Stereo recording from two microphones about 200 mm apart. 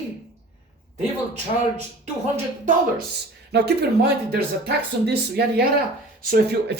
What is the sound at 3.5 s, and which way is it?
A woman's voice, 55° right (ahead or behind).